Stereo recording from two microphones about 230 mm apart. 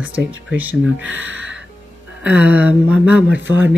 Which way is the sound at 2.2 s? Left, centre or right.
Centre.